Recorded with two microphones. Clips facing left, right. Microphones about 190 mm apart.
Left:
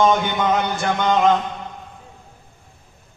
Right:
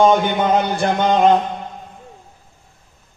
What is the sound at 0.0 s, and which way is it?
A man's voice, 35° right (ahead or behind).